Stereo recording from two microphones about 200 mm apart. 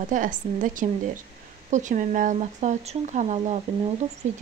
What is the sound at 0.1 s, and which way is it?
Speech, 40° right (ahead or behind).